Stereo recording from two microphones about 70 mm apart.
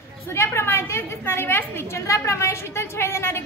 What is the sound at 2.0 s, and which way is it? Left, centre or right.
A woman's voice, left.